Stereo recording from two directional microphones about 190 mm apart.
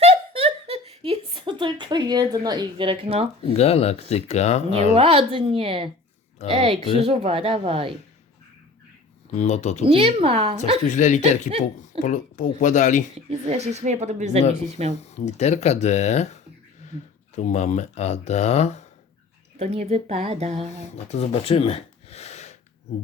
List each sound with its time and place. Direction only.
0.0 s a sound: 30° right (ahead or behind)
3.4 s speech: 35° left (ahead or behind)
4.9 s speech: 30° right (ahead or behind)
9.3 s speech: 35° left (ahead or behind)
9.8 s speech: 30° right (ahead or behind)
10.8 s speech: 40° left (ahead or behind)
13.1 s speech: 35° right (ahead or behind)
15.0 s speech: 35° left (ahead or behind)
19.5 s speech: 35° right (ahead or behind)
20.9 s speech: 35° left (ahead or behind)